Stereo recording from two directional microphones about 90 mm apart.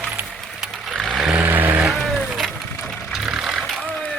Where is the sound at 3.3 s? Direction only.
5° right (ahead or behind).